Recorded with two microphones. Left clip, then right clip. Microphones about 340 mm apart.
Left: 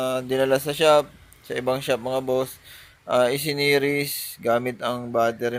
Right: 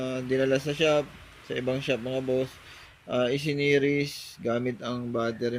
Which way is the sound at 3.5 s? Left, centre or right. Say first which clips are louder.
Left 3 dB; centre.